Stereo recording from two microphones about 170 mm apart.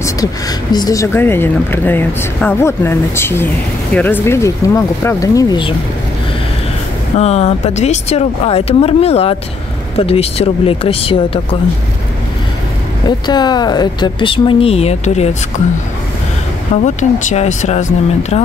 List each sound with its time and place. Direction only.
0.0 s speech: 20° left (ahead or behind)
7.2 s speech: 40° left (ahead or behind)
13.0 s speech: 25° left (ahead or behind)
16.8 s speech: 45° left (ahead or behind)